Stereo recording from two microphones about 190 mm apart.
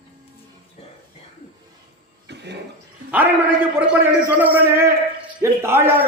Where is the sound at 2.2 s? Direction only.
65° right (ahead or behind).